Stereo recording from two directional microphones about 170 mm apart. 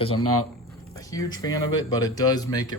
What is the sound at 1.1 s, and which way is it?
Speech, 20° left (ahead or behind).